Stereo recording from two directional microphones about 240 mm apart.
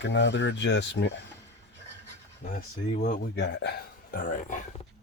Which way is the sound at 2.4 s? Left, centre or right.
Left.